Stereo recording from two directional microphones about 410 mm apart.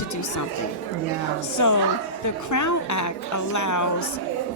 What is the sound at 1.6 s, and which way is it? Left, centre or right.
A woman's voice, left.